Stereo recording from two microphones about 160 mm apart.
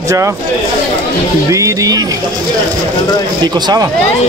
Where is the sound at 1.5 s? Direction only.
20° right (ahead or behind).